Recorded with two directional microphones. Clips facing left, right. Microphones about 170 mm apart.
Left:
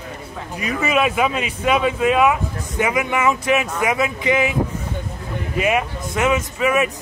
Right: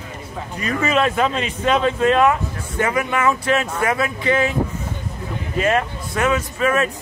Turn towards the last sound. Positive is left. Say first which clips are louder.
# even
turn(degrees=15)  # may be behind; listen again after turning